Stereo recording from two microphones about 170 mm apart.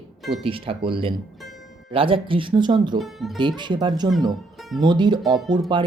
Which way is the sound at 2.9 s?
Centre (ahead or behind).